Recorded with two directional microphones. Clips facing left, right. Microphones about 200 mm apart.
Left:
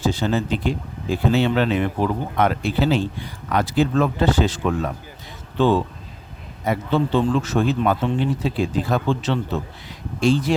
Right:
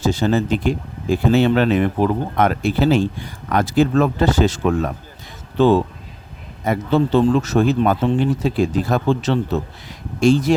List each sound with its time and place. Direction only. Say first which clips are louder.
0.0 s speech: right 4 dB; 45° right (ahead or behind)